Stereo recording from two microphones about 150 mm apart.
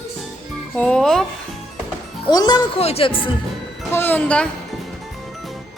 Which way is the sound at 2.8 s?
40° left (ahead or behind).